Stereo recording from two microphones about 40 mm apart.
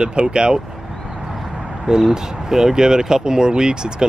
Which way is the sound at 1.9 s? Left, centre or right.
Centre.